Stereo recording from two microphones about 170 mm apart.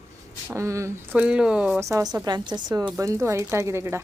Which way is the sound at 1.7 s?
20° right (ahead or behind).